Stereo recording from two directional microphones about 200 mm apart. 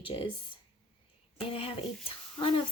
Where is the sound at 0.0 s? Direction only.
25° left (ahead or behind).